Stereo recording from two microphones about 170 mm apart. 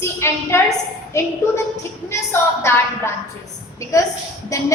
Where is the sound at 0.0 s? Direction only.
15° left (ahead or behind).